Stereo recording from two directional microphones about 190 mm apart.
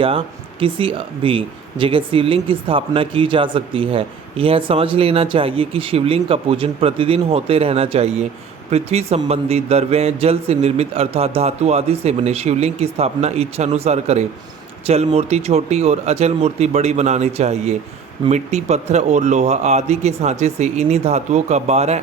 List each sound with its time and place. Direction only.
0.0 s speech: 30° right (ahead or behind)